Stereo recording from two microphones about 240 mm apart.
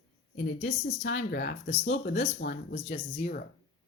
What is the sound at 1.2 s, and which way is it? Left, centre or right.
Speech, left.